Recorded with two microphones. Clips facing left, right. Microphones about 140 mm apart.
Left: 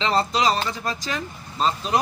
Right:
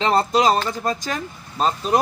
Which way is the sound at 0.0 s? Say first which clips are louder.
Right 4 dB; 50° right (ahead or behind).